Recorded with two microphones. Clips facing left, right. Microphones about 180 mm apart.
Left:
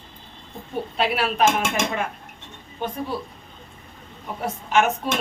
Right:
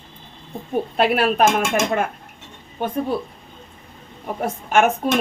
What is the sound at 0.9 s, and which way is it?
Speech, 50° right (ahead or behind).